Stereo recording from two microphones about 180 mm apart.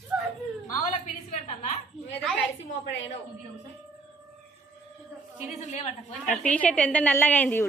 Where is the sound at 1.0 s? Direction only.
40° left (ahead or behind).